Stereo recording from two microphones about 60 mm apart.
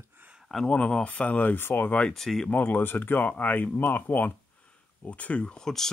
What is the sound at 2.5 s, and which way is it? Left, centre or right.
Speech, left.